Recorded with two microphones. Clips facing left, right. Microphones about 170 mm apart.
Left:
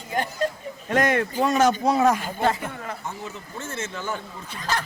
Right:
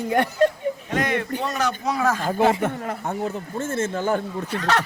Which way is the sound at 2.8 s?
55° right (ahead or behind).